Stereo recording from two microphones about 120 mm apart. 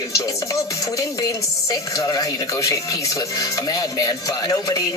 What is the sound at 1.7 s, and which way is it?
Speech, 35° left (ahead or behind).